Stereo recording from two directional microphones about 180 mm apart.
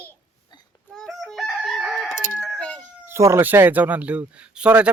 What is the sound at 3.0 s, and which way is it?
Speech, 15° right (ahead or behind).